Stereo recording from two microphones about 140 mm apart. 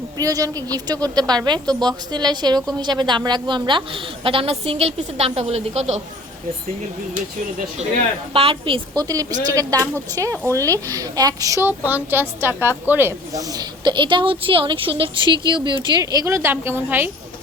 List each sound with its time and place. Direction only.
0.2 s a woman's voice: 25° right (ahead or behind); by 6.0 s 50° right (ahead or behind)
8.3 s a woman's voice: 40° right (ahead or behind)
9.0 s a woman's voice: 25° right (ahead or behind)